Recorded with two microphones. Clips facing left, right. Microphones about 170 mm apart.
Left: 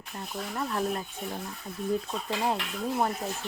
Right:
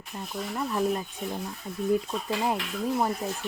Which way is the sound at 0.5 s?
10° right (ahead or behind).